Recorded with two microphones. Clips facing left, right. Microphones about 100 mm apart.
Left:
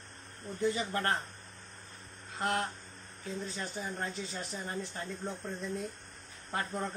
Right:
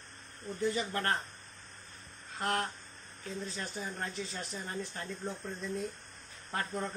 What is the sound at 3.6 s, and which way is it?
Speech, 15° left (ahead or behind).